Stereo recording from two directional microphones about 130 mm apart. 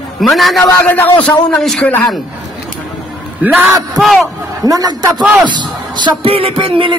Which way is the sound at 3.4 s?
10° right (ahead or behind).